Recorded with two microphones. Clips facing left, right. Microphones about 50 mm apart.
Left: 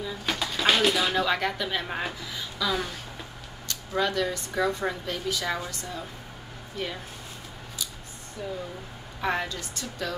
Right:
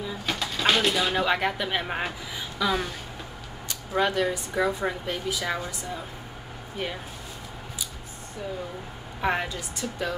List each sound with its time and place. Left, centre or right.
0.3 s pigeon: centre
1.1 s speech: centre
9.2 s speech: centre